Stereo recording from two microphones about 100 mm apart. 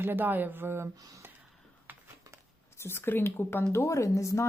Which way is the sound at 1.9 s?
15° right (ahead or behind).